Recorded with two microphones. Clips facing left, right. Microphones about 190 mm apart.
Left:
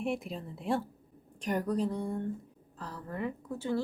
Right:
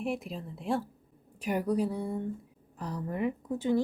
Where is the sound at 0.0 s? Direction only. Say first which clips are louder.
Even; centre (ahead or behind).